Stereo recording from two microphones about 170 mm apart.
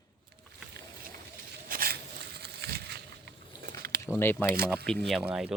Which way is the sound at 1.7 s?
60° right (ahead or behind).